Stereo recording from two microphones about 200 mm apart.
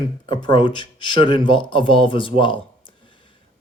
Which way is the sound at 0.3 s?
25° left (ahead or behind).